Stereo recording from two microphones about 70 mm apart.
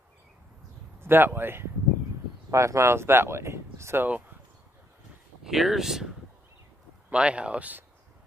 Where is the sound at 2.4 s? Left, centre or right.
Right.